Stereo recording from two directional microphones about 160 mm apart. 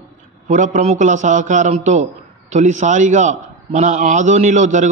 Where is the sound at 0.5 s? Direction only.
50° right (ahead or behind).